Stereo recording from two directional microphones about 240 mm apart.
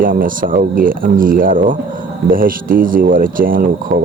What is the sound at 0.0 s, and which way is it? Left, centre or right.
Speech, right.